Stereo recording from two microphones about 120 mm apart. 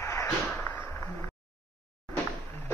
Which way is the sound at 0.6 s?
15° left (ahead or behind).